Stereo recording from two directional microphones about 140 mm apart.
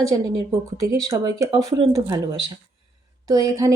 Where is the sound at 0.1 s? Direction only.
20° right (ahead or behind).